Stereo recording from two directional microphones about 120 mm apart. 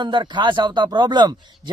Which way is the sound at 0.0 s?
40° right (ahead or behind).